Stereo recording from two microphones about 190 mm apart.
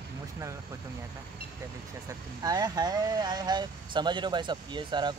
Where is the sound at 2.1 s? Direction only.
20° right (ahead or behind).